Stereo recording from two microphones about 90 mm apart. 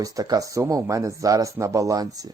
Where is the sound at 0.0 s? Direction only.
40° right (ahead or behind).